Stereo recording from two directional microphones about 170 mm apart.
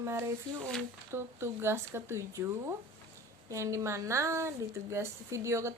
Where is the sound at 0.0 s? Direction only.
15° right (ahead or behind).